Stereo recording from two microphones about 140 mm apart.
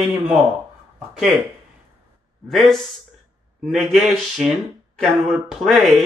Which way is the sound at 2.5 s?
Centre (ahead or behind).